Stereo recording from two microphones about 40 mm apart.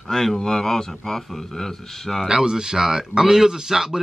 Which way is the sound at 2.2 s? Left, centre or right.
Centre.